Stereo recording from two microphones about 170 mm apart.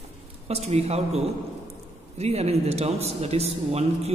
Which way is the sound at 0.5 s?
40° right (ahead or behind).